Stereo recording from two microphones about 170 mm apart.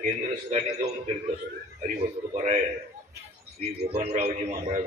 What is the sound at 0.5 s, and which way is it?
Speech, 40° right (ahead or behind).